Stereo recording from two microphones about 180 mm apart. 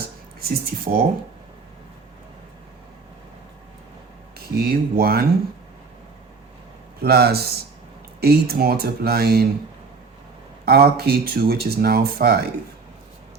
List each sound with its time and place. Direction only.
0.3 s speech: 60° right (ahead or behind)
4.5 s speech: 60° right (ahead or behind)
7.0 s speech: 60° right (ahead or behind)
10.7 s speech: 60° right (ahead or behind)